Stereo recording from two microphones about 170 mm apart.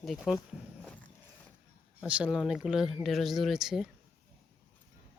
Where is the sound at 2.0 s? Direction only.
5° right (ahead or behind).